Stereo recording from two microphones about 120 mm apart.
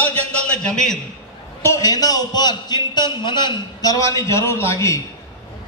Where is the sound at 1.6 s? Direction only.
25° left (ahead or behind).